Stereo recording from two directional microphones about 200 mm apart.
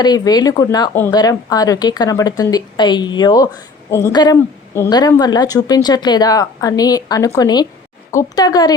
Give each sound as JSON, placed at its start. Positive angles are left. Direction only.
{"t": 0.0, "sound": "speech", "side_deg": 20}